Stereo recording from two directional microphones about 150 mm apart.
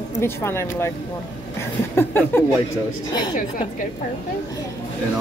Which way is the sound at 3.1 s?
30° left (ahead or behind).